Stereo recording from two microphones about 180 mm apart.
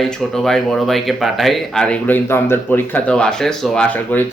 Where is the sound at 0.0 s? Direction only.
Centre (ahead or behind).